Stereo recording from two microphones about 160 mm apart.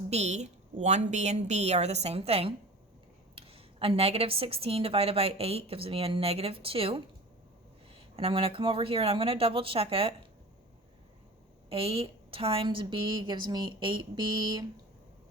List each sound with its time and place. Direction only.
0.1 s a woman's voice: 45° right (ahead or behind)
8.1 s a woman's voice: 35° right (ahead or behind)
11.7 s a woman's voice: 35° right (ahead or behind)